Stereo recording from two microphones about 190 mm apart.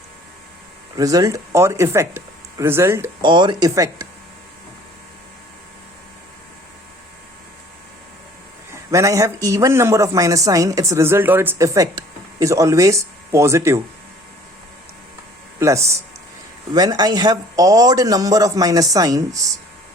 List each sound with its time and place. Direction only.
0.9 s a man's voice: 20° right (ahead or behind)
3.2 s a man's voice: 25° right (ahead or behind)
8.9 s a man's voice: 15° right (ahead or behind)
15.5 s a man's voice: 15° right (ahead or behind)